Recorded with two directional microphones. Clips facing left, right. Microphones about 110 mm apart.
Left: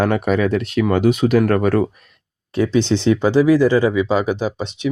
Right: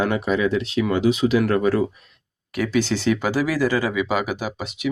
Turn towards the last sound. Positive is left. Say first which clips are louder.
# left 6 dB
turn(degrees=25)  # may be behind; listen again after turning